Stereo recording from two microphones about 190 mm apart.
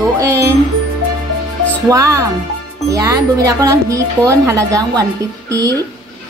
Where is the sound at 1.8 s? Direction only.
15° right (ahead or behind).